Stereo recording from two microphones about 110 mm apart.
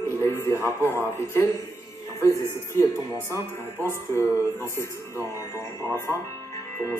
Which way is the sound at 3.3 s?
25° right (ahead or behind).